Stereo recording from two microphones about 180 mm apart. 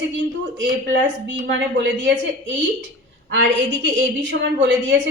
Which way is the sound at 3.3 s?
80° right.